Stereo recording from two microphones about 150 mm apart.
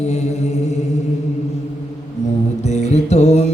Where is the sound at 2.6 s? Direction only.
50° left (ahead or behind).